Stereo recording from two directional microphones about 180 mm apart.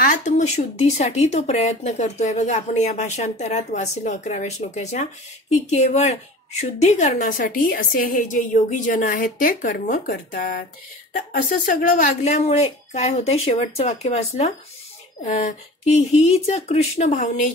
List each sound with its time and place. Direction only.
0.0 s a woman's voice: 45° left (ahead or behind)